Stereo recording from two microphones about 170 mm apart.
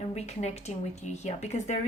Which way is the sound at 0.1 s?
40° left (ahead or behind).